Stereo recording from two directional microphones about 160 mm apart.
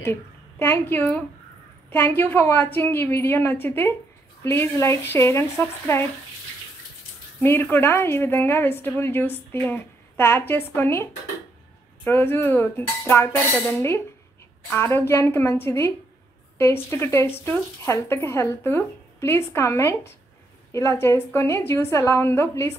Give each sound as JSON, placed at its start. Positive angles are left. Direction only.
{"t": 0.0, "sound": "a woman's voice", "side_deg": 15}
{"t": 7.4, "sound": "a woman's voice", "side_deg": 15}